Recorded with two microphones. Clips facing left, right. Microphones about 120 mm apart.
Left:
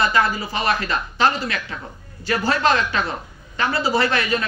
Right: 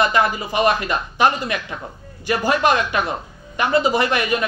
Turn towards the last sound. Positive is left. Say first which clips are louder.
# right 1 dB
turn(degrees=-15)  # may be behind; listen again after turning